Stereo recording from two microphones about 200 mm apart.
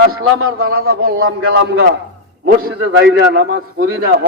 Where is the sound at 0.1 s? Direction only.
50° right (ahead or behind).